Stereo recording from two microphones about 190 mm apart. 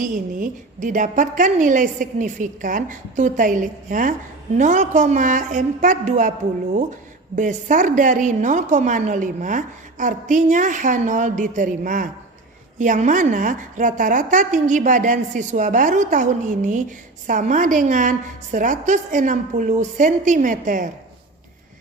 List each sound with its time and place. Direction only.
0.0 s a woman's voice: 40° right (ahead or behind)
7.3 s a woman's voice: 40° right (ahead or behind)